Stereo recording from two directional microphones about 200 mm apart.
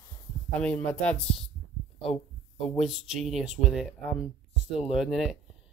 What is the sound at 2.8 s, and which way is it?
Speech, centre (ahead or behind).